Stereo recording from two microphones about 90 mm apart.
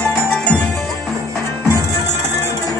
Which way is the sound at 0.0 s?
10° left (ahead or behind).